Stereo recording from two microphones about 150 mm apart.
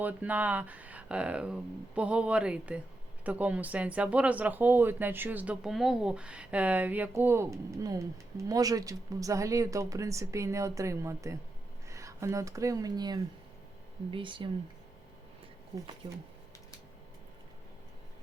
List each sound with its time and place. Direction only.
0.0 s speech: 10° right (ahead or behind); by 14.5 s 35° right (ahead or behind)
16.0 s speech: 30° right (ahead or behind)